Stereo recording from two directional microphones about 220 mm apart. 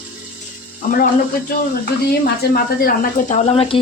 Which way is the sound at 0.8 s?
40° left (ahead or behind).